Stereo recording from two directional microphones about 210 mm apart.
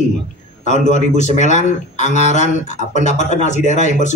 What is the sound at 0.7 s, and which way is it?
A man's voice, 35° left (ahead or behind).